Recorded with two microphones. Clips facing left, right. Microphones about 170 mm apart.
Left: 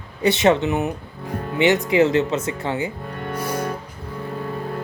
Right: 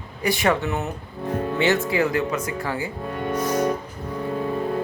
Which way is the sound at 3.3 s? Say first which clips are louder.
Right 3 dB; 10° left (ahead or behind).